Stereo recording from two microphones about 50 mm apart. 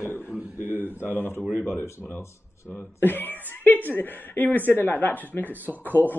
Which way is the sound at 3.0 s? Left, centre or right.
Left.